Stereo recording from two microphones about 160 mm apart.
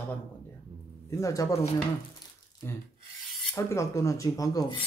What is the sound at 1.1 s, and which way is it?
Speech, 20° left (ahead or behind).